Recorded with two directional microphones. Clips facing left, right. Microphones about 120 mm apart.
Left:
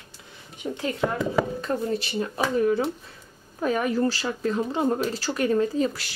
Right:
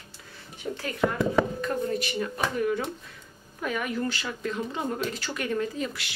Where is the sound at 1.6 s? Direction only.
30° left (ahead or behind).